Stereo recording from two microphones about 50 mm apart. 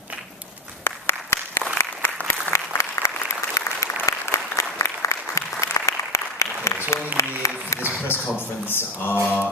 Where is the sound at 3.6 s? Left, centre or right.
Left.